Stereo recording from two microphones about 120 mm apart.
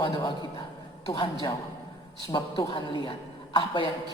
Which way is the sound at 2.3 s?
40° left (ahead or behind).